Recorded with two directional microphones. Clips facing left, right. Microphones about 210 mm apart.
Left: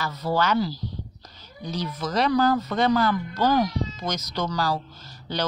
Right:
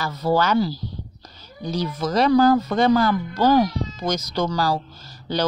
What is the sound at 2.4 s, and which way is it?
A man's voice, 45° right (ahead or behind).